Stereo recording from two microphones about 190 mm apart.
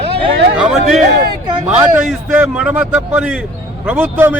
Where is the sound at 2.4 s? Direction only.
5° right (ahead or behind).